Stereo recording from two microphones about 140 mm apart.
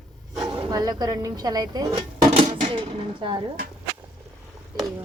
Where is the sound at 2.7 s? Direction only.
35° right (ahead or behind).